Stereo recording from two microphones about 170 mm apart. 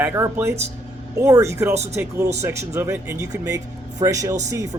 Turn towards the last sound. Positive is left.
turn(degrees=-20)  # may be behind; listen again after turning